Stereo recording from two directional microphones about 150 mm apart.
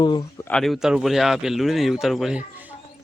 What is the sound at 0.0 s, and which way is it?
Speech, 30° left (ahead or behind).